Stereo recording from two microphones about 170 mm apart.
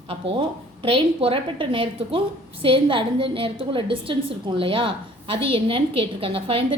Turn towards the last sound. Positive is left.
turn(degrees=-30)  # may be behind; listen again after turning